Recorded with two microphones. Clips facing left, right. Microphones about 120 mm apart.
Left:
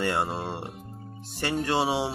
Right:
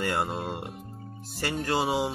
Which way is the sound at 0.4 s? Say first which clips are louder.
Even; 30° left (ahead or behind).